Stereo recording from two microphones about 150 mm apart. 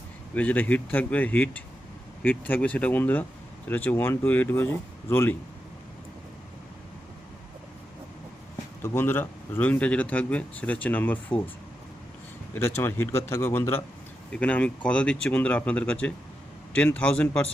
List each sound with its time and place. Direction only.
0.3 s speech: 10° left (ahead or behind)
8.8 s speech: 15° left (ahead or behind)
12.5 s speech: 15° left (ahead or behind)